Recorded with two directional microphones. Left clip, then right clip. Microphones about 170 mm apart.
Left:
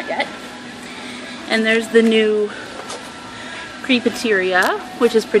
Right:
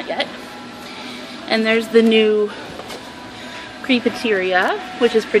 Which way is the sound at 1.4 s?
5° right (ahead or behind).